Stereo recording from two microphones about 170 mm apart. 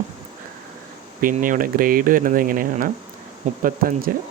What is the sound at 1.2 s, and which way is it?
Speech, 55° right (ahead or behind).